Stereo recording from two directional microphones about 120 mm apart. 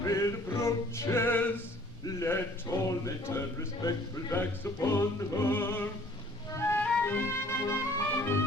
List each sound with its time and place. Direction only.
0.0 s male singing: 25° left (ahead or behind)
2.0 s a sound: 20° left (ahead or behind)
6.6 s music: 20° left (ahead or behind)